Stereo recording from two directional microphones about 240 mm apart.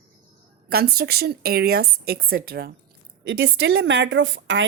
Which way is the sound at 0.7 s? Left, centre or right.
Right.